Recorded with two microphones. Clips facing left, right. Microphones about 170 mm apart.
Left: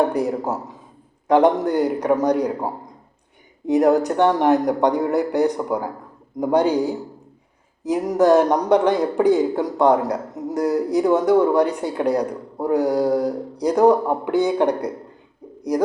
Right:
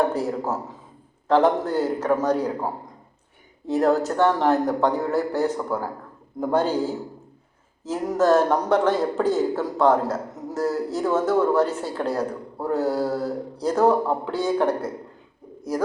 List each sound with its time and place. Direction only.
0.1 s speech: 15° left (ahead or behind)